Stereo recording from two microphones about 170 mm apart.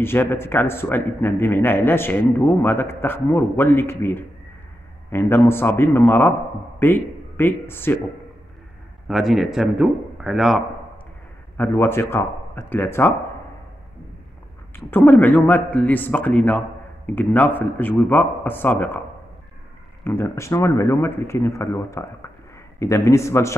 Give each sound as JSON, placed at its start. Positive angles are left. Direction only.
{"t": 0.0, "sound": "a man's voice", "side_deg": 15}
{"t": 9.0, "sound": "speech", "side_deg": 0}
{"t": 11.5, "sound": "a man's voice", "side_deg": 10}
{"t": 14.9, "sound": "a man's voice", "side_deg": 10}
{"t": 20.0, "sound": "a man's voice", "side_deg": 15}